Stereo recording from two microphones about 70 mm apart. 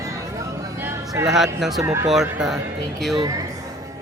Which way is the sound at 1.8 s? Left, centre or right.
Right.